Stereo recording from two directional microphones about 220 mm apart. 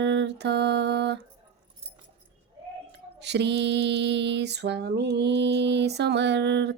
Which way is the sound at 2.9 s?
50° right (ahead or behind).